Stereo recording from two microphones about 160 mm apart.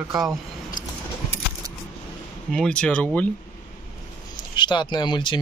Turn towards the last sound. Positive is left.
turn(degrees=30)  # may be behind; listen again after turning